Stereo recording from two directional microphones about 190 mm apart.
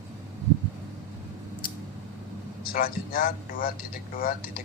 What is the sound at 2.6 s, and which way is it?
A man's voice, 50° left (ahead or behind).